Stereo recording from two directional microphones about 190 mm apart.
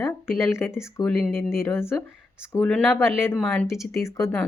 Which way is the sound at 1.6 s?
15° left (ahead or behind).